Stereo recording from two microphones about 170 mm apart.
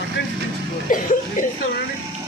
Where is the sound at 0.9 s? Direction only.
55° left (ahead or behind).